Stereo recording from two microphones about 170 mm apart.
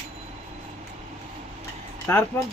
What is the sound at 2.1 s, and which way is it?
Speech, 15° left (ahead or behind).